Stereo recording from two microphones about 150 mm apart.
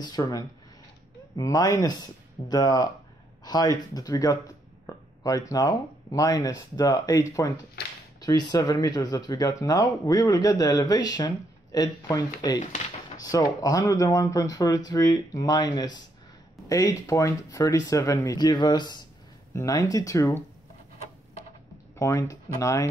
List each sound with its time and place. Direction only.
0.0 s speech: 25° left (ahead or behind)
7.8 s speech: 90° left
8.2 s speech: 25° left (ahead or behind)
21.9 s speech: 20° left (ahead or behind)